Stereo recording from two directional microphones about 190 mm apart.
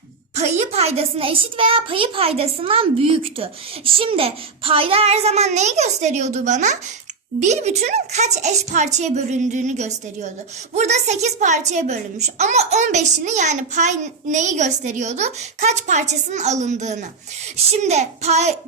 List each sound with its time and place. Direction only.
0.3 s a child's voice: 35° right (ahead or behind)